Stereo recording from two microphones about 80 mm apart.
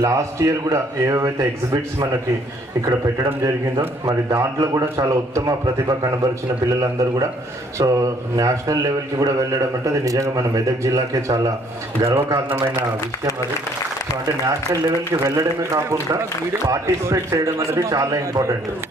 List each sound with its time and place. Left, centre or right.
0.0 s a man's voice: right
6.7 s a man's voice: right
14.4 s a man's voice: right